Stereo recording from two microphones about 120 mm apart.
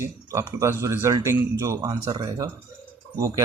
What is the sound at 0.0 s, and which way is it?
Speech, 25° right (ahead or behind).